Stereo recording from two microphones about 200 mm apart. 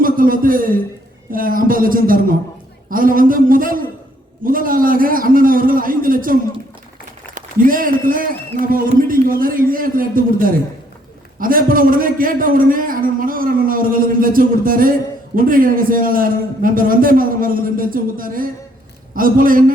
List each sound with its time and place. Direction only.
0.0 s a man's voice: 45° right (ahead or behind)